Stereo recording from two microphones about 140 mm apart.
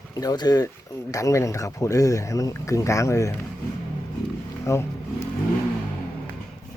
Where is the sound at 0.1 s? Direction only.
25° left (ahead or behind).